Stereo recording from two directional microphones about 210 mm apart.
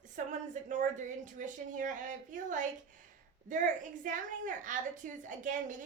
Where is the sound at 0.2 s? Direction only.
40° right (ahead or behind).